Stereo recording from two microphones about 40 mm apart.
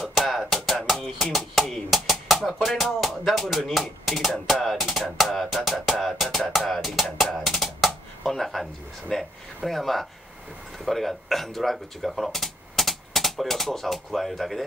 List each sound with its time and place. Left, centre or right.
0.0 s music: centre
3.6 s a sound: centre
4.6 s music: centre
7.3 s drum: centre
8.3 s a sound: centre
9.1 s speech: centre